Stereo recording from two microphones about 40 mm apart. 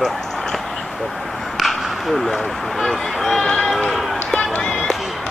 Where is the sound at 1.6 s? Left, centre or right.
Centre.